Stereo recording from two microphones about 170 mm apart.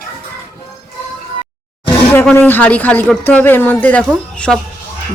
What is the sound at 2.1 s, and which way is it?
A man's voice, 10° left (ahead or behind).